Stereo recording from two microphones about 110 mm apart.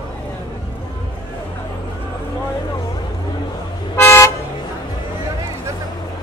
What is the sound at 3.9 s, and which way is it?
Toot, 25° left (ahead or behind).